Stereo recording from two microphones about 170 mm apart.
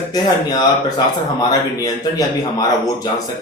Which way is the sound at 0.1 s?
25° left (ahead or behind).